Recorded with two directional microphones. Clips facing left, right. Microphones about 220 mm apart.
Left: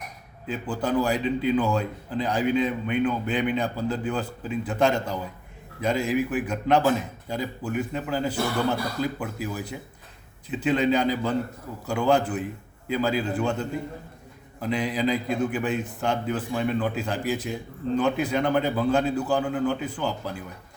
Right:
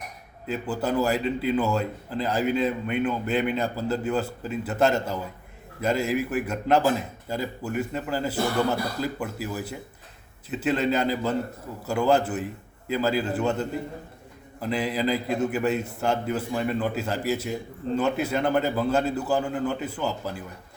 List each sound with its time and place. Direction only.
0.4 s a man's voice: 5° right (ahead or behind)
10.5 s a man's voice: 5° right (ahead or behind)